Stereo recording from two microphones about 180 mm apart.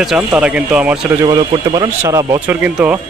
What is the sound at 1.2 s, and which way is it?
Speech, 20° right (ahead or behind).